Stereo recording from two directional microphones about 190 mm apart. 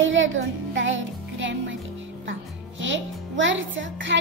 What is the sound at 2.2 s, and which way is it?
A child's voice, 80° right.